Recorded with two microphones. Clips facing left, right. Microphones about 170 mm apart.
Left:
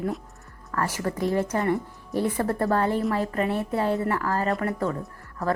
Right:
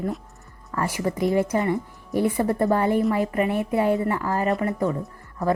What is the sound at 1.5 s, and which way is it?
Speech, centre (ahead or behind).